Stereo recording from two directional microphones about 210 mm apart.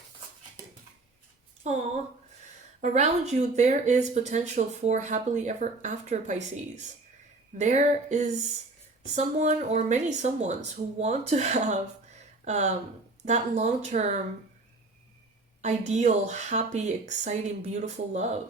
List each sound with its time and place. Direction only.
1.6 s speech: 35° right (ahead or behind)
2.8 s speech: 35° right (ahead or behind)
15.6 s speech: 35° right (ahead or behind)